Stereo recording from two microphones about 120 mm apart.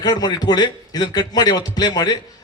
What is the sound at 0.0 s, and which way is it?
A man's voice, 35° left (ahead or behind).